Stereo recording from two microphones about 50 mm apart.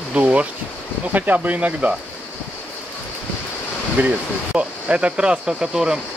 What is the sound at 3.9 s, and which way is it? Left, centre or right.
Speech, right.